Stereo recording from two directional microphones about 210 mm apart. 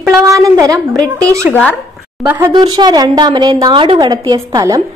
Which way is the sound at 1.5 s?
5° left (ahead or behind).